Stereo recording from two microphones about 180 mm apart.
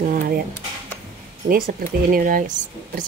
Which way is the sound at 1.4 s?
50° right (ahead or behind).